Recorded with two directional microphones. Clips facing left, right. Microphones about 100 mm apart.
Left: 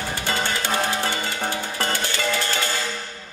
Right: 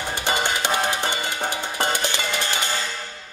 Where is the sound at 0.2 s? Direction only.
20° right (ahead or behind).